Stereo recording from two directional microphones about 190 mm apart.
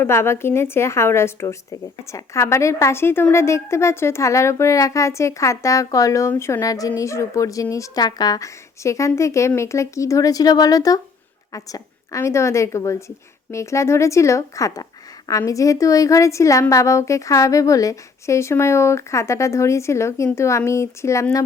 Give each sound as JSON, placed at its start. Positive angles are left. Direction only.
{"t": 0.0, "sound": "a woman's voice", "side_deg": 15}